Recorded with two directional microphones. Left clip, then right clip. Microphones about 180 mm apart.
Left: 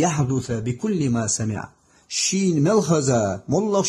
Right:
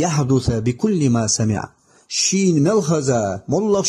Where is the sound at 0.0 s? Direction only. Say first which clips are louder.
Right 3 dB; 30° right (ahead or behind).